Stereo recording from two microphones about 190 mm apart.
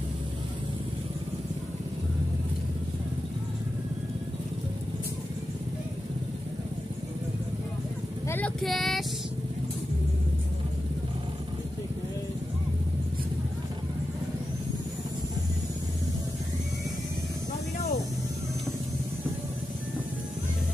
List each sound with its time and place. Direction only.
8.3 s speech: 5° left (ahead or behind)